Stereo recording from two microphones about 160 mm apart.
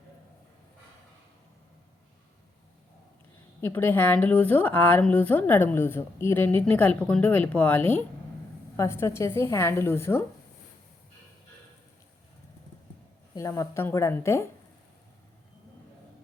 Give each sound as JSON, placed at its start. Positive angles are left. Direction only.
{"t": 3.6, "sound": "a woman's voice", "side_deg": 15}
{"t": 13.3, "sound": "a woman's voice", "side_deg": 20}